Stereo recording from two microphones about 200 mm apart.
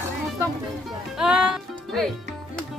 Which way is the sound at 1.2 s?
5° right (ahead or behind).